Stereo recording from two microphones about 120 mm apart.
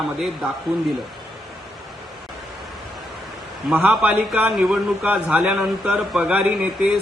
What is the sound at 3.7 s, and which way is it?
A man's voice, 10° right (ahead or behind).